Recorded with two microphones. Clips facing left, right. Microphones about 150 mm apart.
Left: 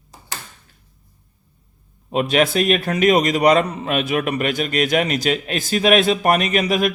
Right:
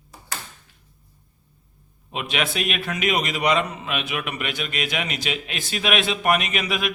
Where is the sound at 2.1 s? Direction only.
40° left (ahead or behind).